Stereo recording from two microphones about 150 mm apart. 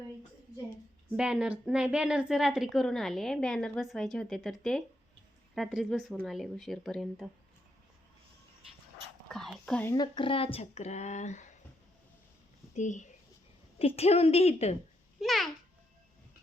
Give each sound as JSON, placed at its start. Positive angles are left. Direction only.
{"t": 1.1, "sound": "a woman's voice", "side_deg": -5}
{"t": 9.3, "sound": "speech", "side_deg": 0}
{"t": 9.8, "sound": "speech", "side_deg": 25}
{"t": 12.7, "sound": "speech", "side_deg": 55}
{"t": 13.7, "sound": "a woman's voice", "side_deg": 40}
{"t": 15.2, "sound": "a woman's voice", "side_deg": 0}